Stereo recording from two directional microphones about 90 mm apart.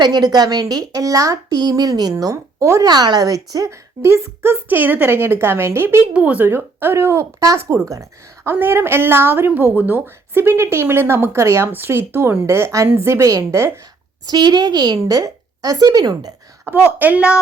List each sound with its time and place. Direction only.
0.0 s speech: 50° right (ahead or behind); by 6.1 s 25° right (ahead or behind)
6.1 s speech: 15° right (ahead or behind); by 13.7 s 35° right (ahead or behind)
14.3 s a woman's voice: 55° right (ahead or behind)
16.6 s a woman's voice: 20° right (ahead or behind)